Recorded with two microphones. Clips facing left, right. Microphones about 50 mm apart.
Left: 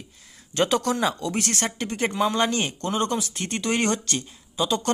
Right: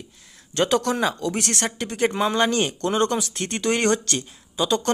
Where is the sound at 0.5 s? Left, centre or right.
Centre.